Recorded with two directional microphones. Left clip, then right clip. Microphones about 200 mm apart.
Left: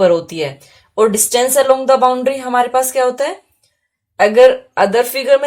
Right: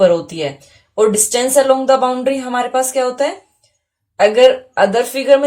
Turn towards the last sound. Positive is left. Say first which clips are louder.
# even
turn(degrees=35)  # may be behind; listen again after turning